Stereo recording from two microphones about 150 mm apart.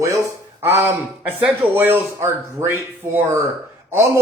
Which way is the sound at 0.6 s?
15° right (ahead or behind).